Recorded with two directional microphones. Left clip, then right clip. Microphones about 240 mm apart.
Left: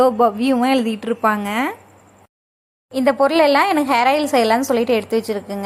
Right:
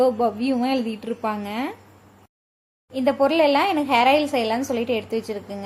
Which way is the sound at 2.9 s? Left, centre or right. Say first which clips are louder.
Left 4 dB; centre.